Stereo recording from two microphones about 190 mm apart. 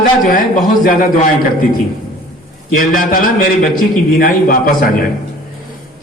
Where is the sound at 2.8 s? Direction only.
50° left (ahead or behind).